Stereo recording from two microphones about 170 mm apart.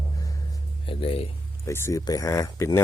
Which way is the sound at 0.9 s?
35° left (ahead or behind).